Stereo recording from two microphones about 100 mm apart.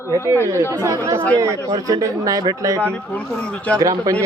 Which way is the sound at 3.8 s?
35° right (ahead or behind).